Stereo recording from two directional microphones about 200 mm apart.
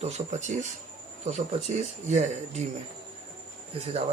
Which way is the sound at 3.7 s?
30° right (ahead or behind).